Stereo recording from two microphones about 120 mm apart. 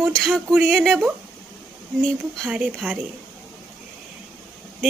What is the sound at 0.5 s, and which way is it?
Speech, 15° right (ahead or behind).